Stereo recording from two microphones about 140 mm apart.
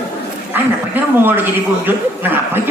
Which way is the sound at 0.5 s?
15° right (ahead or behind).